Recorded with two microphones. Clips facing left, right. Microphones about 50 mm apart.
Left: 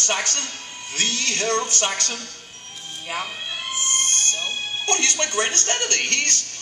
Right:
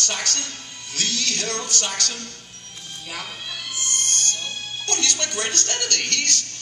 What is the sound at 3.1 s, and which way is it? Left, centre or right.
Music, left.